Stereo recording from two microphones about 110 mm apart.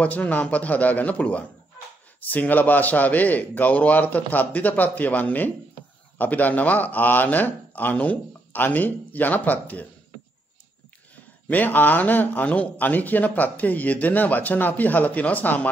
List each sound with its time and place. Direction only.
0.0 s speech: 15° left (ahead or behind)
11.4 s speech: 15° left (ahead or behind)